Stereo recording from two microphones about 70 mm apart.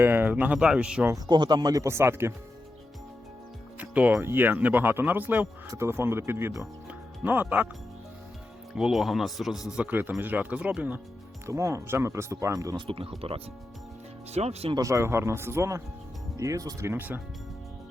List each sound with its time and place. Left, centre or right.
0.0 s speech: right; by 1.0 s centre
1.3 s speech: right
1.8 s speech: right
3.8 s music: right
4.2 s speech: right
5.6 s speech: right
6.8 s music: right
8.7 s speech: centre
9.7 s speech: right
11.4 s speech: right
14.8 s speech: right
16.4 s speech: right
16.8 s speech: right